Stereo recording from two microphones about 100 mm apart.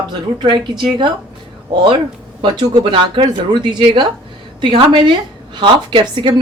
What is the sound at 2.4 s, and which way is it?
A woman's voice, 45° right (ahead or behind).